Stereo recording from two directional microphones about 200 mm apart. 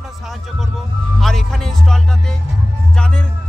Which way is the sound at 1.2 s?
Centre (ahead or behind).